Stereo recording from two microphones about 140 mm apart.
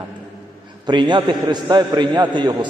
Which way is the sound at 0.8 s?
35° right (ahead or behind).